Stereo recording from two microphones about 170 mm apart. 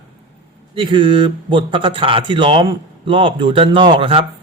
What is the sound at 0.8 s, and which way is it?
Speech, 30° right (ahead or behind).